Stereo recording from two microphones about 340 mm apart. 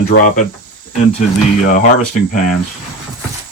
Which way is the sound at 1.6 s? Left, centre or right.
Left.